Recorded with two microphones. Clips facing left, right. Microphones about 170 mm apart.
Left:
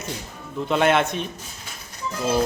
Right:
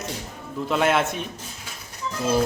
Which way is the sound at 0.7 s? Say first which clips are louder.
Left 2 dB; centre (ahead or behind).